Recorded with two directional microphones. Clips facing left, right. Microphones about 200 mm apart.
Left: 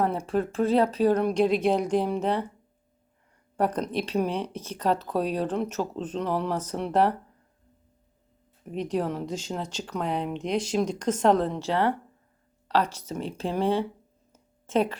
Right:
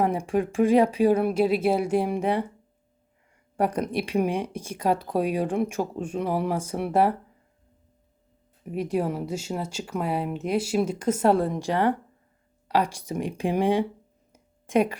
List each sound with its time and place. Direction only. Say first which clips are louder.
0.0 s speech: right 2 dB; 10° right (ahead or behind)
3.6 s speech: right 1 dB; 10° right (ahead or behind)
8.6 s speech: right 2 dB; 10° right (ahead or behind)
14.3 s a sound: right 2 dB; 10° right (ahead or behind)